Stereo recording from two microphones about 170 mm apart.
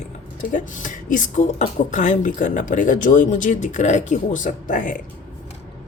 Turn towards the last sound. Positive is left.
turn(degrees=50)  # may be behind; listen again after turning